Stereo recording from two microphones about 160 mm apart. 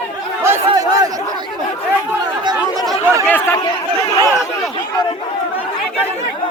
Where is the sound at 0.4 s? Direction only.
20° right (ahead or behind).